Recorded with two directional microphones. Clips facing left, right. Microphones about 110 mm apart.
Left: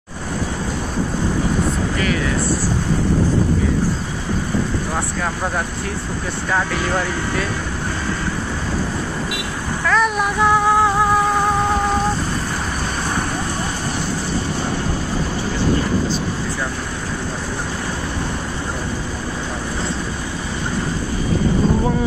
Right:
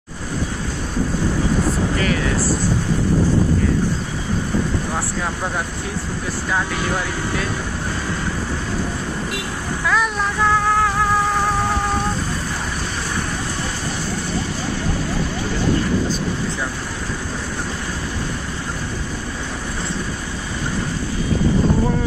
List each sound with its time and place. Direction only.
9.8 s speech: centre (ahead or behind)
10.1 s music: 15° left (ahead or behind)